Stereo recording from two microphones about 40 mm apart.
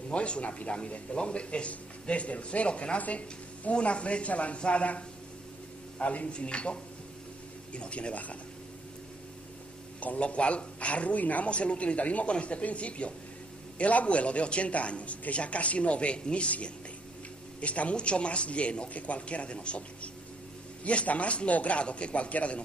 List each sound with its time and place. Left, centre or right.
0.1 s a man's voice: left
9.9 s a woman's voice: left